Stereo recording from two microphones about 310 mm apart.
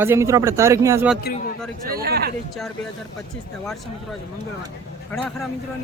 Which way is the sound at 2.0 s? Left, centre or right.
Right.